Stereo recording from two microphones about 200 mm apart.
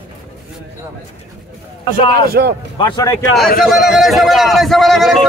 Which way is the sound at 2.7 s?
25° left (ahead or behind).